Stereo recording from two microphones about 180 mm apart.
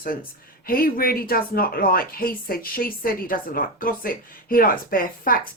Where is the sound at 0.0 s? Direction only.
55° left (ahead or behind).